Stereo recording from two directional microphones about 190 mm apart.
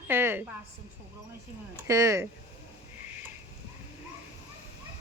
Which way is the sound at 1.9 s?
15° right (ahead or behind).